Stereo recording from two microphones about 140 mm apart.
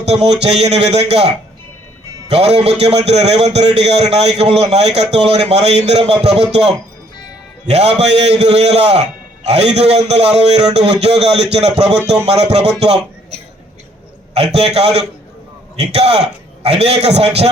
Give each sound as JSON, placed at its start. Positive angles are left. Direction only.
{"t": 0.0, "sound": "a man's voice", "side_deg": -50}
{"t": 2.3, "sound": "a man's voice", "side_deg": -50}
{"t": 7.7, "sound": "a man's voice", "side_deg": -50}